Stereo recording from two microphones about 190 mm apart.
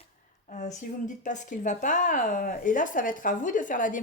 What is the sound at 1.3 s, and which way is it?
A woman's voice, 40° left (ahead or behind).